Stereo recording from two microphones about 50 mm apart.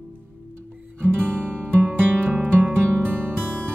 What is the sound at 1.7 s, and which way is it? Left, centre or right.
Music, right.